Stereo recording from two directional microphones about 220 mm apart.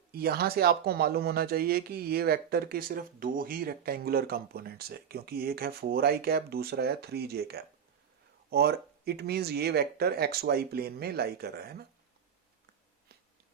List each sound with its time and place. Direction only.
0.1 s speech: 45° right (ahead or behind)